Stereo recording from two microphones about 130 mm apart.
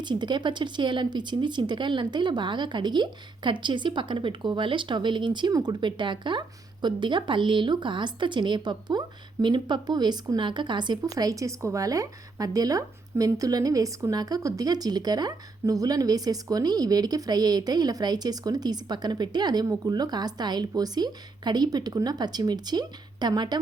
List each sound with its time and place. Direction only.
0.0 s speech: 35° right (ahead or behind)